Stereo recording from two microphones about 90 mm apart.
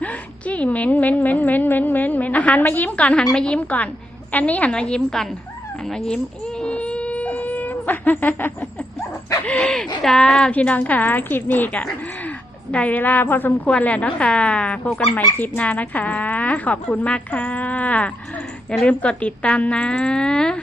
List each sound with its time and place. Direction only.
0.0 s speech: 15° left (ahead or behind)
6.6 s a sound: 10° left (ahead or behind)
9.5 s a woman's voice: 10° left (ahead or behind)